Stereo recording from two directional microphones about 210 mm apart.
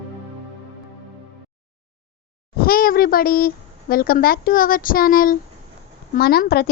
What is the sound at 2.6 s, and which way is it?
Speech, 45° left (ahead or behind).